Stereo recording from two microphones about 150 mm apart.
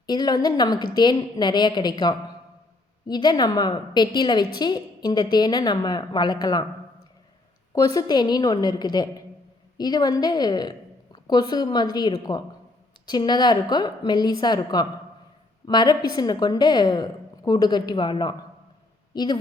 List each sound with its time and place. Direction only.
0.1 s a woman's voice: 30° left (ahead or behind)
7.7 s a woman's voice: 25° left (ahead or behind)